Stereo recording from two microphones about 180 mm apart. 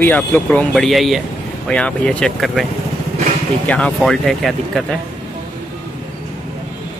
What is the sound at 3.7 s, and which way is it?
Speech, 5° left (ahead or behind).